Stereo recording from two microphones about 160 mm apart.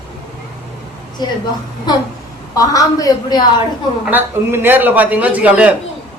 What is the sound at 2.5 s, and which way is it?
Speech, 20° left (ahead or behind).